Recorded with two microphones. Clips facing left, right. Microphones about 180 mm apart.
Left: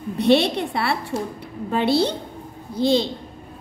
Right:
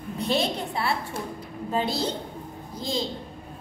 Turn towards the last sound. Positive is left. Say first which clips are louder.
# left 10 dB
turn(degrees=75)  # may be behind; listen again after turning